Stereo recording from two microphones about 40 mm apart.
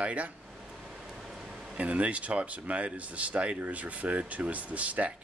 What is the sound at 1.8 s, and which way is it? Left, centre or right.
Speech, right.